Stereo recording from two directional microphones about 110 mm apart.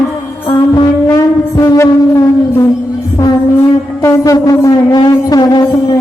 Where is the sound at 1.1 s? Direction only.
30° left (ahead or behind).